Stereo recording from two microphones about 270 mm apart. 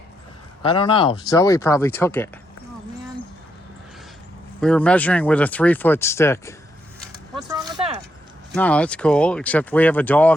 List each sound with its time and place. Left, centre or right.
0.6 s speech: centre
4.6 s speech: centre
7.7 s a sound: right
8.5 s speech: centre